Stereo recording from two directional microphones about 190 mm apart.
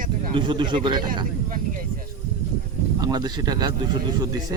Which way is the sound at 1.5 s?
45° right (ahead or behind).